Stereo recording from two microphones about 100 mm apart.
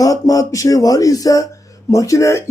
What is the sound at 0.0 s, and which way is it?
Speech, 35° left (ahead or behind).